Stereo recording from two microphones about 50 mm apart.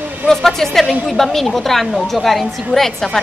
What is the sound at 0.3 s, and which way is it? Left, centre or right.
A woman's voice, centre.